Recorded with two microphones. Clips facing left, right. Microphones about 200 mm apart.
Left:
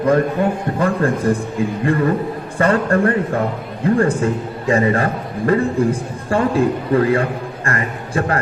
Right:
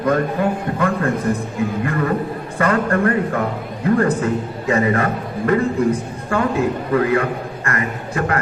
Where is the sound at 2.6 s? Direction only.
30° left (ahead or behind).